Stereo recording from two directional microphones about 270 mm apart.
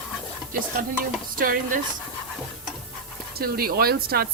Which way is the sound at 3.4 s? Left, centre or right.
Right.